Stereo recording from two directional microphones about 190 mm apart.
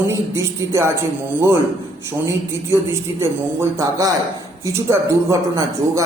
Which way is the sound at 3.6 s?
15° right (ahead or behind).